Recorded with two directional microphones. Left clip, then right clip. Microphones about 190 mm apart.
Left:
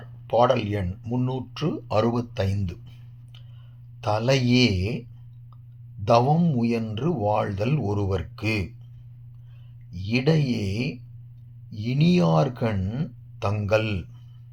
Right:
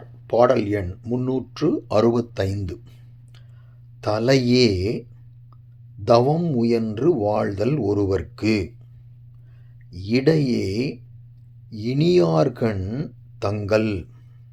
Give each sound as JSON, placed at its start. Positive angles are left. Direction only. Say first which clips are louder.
{"t": 0.3, "sound": "speech", "louder": "right 3 dB", "side_deg": -35}
{"t": 4.0, "sound": "speech", "louder": "right 4 dB", "side_deg": -35}
{"t": 6.1, "sound": "speech", "louder": "right 3 dB", "side_deg": -30}
{"t": 9.9, "sound": "speech", "louder": "right 5 dB", "side_deg": -35}